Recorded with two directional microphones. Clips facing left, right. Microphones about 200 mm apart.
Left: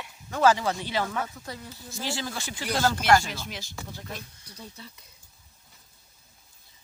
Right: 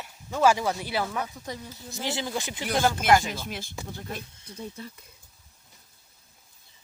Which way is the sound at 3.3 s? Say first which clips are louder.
Right 3 dB; 50° right (ahead or behind).